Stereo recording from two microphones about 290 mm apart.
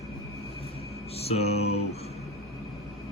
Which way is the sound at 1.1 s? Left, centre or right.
Left.